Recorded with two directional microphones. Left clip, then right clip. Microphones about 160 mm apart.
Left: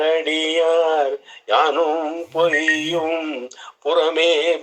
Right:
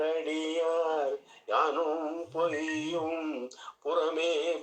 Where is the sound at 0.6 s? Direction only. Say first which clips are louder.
Left 12 dB; 30° left (ahead or behind).